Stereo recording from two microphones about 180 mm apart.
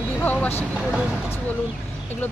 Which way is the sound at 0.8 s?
5° right (ahead or behind).